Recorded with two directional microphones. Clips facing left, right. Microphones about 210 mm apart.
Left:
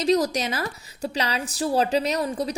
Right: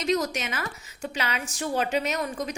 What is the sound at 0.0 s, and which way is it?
A woman's voice, 35° left (ahead or behind).